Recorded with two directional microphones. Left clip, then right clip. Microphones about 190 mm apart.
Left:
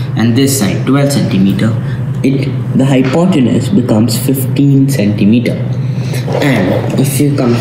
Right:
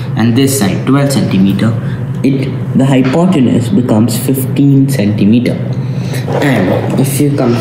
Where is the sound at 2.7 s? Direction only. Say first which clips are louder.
Even; 15° right (ahead or behind).